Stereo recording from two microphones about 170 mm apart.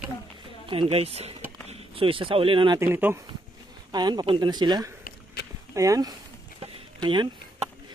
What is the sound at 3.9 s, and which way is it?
Speech, 25° right (ahead or behind).